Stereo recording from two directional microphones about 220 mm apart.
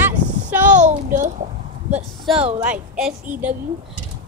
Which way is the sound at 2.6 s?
5° right (ahead or behind).